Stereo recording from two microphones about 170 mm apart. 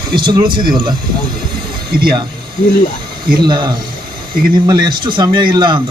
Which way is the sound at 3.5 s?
25° right (ahead or behind).